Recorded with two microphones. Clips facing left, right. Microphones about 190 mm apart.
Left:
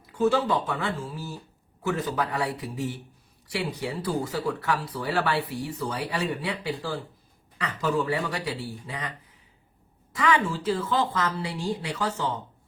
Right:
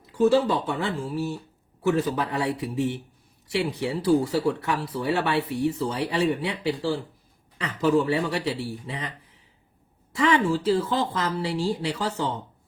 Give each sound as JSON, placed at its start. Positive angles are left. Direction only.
{"t": 0.2, "sound": "speech", "side_deg": -30}
{"t": 10.2, "sound": "speech", "side_deg": -30}